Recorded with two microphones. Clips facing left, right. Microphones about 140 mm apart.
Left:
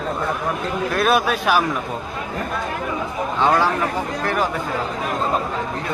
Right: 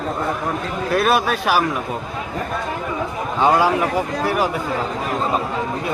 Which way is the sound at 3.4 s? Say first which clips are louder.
Right 2 dB; 15° right (ahead or behind).